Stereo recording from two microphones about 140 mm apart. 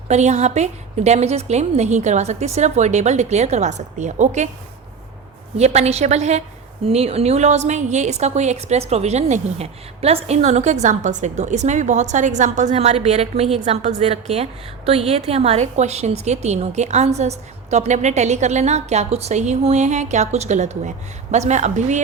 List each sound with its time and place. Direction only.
0.1 s a woman's voice: 55° right (ahead or behind)
5.5 s a woman's voice: 50° right (ahead or behind)